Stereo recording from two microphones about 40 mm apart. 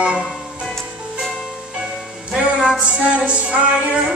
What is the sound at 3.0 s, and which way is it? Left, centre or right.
Music, right.